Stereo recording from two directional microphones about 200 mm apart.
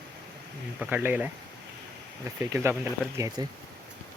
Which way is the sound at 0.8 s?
10° right (ahead or behind).